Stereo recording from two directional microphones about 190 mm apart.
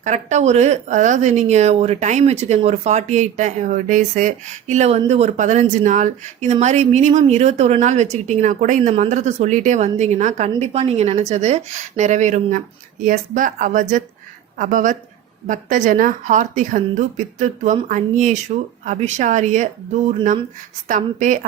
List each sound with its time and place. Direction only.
0.0 s a woman's voice: 40° right (ahead or behind)